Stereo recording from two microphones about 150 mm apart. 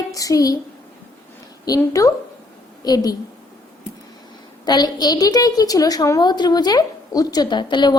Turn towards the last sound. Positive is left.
turn(degrees=30)  # may be behind; listen again after turning